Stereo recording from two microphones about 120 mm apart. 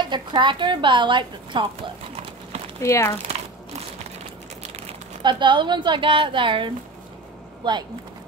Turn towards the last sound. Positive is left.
turn(degrees=-40)  # may be behind; listen again after turning